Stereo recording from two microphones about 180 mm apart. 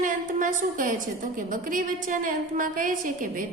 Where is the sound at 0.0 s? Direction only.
45° right (ahead or behind).